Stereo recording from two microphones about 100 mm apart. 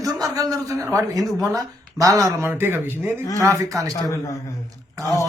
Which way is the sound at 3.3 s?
35° right (ahead or behind).